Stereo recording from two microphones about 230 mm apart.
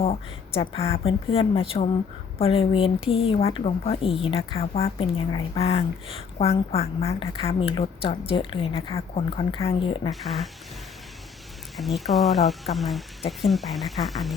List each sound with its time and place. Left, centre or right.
0.5 s a woman's voice: left
10.1 s speech: centre
11.8 s speech: centre